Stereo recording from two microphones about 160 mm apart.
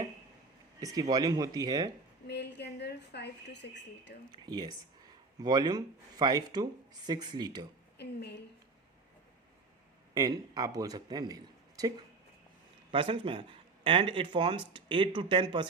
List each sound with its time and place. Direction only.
0.8 s speech: 20° right (ahead or behind)
2.2 s a woman's voice: 90° left
4.3 s speech: 25° right (ahead or behind)
7.9 s a woman's voice: 90° left
10.2 s speech: 25° right (ahead or behind)
12.9 s speech: 35° right (ahead or behind)